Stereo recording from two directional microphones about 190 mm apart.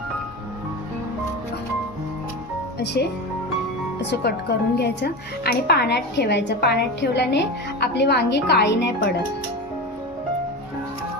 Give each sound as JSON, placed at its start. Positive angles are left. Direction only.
{"t": 2.7, "sound": "speech", "side_deg": 60}
{"t": 4.1, "sound": "speech", "side_deg": 60}